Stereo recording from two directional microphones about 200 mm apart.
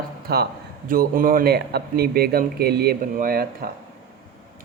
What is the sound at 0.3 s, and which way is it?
A man's voice, 50° right (ahead or behind).